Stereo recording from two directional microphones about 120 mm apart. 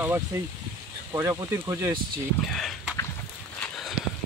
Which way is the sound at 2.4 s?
5° left (ahead or behind).